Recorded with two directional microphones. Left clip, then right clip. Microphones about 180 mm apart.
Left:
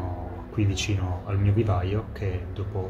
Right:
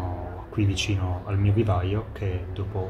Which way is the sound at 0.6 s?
15° right (ahead or behind).